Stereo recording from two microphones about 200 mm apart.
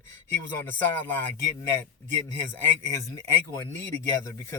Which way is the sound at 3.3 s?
10° left (ahead or behind).